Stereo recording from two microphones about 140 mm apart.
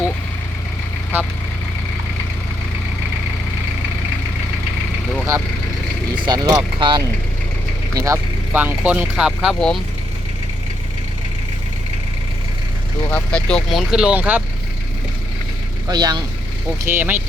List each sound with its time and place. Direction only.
6.2 s vehicle: 25° right (ahead or behind)
6.7 s speech: 35° right (ahead or behind)
7.9 s speech: 25° right (ahead or behind)
8.5 s speech: 10° right (ahead or behind)
13.1 s speech: 10° left (ahead or behind); by 14.4 s 10° right (ahead or behind)
15.9 s speech: 30° right (ahead or behind)
16.8 s speech: 15° right (ahead or behind)